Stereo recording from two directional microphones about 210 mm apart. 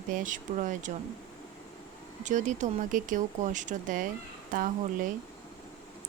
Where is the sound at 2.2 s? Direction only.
35° right (ahead or behind).